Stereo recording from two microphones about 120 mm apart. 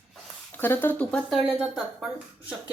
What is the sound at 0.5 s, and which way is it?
Speech, 15° left (ahead or behind).